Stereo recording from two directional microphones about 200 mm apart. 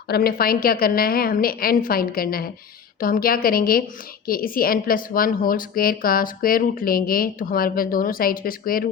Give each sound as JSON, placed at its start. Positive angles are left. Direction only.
{"t": 0.1, "sound": "a woman's voice", "side_deg": 50}